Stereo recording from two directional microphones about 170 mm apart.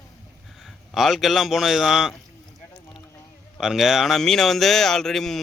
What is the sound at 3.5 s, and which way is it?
Speech, centre (ahead or behind).